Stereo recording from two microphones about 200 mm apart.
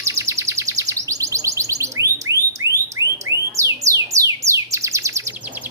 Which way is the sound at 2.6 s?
15° right (ahead or behind).